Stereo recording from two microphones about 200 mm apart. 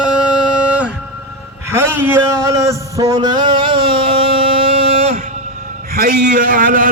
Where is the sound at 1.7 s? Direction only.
10° right (ahead or behind); by 5.1 s 30° right (ahead or behind).